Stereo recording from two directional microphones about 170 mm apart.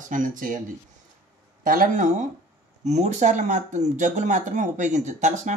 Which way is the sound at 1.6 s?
55° right (ahead or behind).